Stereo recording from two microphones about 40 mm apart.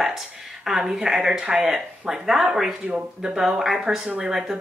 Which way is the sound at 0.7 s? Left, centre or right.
Centre.